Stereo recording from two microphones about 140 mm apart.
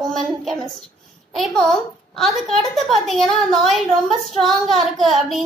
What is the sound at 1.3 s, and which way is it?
A woman's voice, centre (ahead or behind).